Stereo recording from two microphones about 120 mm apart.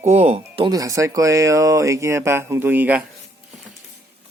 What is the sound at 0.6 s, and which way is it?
Speech, 30° right (ahead or behind).